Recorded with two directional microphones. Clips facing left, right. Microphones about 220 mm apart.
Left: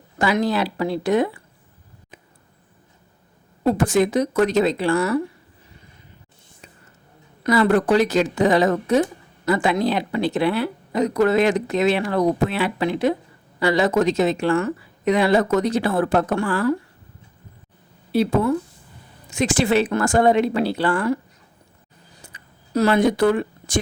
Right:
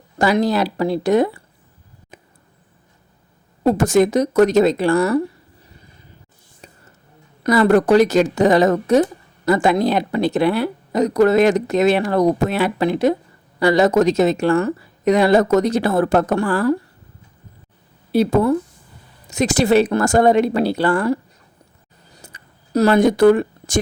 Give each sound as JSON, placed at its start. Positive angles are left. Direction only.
{"t": 0.2, "sound": "a woman's voice", "side_deg": -40}
{"t": 3.6, "sound": "speech", "side_deg": -40}
{"t": 7.4, "sound": "a woman's voice", "side_deg": -45}
{"t": 18.1, "sound": "a woman's voice", "side_deg": -40}
{"t": 22.2, "sound": "a sound", "side_deg": -40}